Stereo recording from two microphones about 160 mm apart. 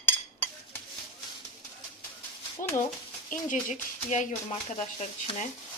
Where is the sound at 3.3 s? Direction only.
55° left (ahead or behind).